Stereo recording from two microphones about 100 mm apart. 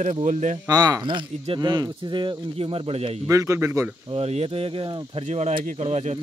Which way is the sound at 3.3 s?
30° right (ahead or behind).